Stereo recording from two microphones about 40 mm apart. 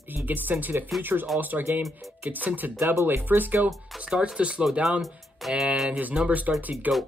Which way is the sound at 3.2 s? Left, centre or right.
Right.